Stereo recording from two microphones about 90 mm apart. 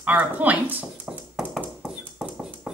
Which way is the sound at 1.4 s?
15° right (ahead or behind).